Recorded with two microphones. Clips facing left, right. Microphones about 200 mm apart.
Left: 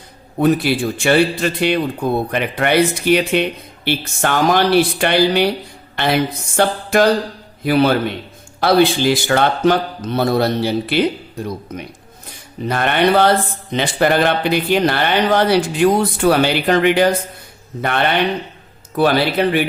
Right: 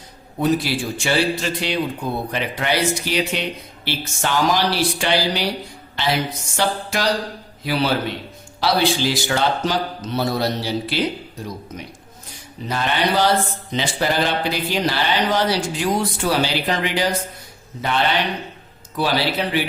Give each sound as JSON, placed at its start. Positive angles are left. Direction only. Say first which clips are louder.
{"t": 0.3, "sound": "speech", "louder": "left 5 dB", "side_deg": 55}
{"t": 6.6, "sound": "music", "louder": "left 8 dB", "side_deg": 55}
{"t": 8.6, "sound": "speech", "louder": "left 6 dB", "side_deg": 55}
{"t": 12.6, "sound": "speech", "louder": "left 6 dB", "side_deg": 60}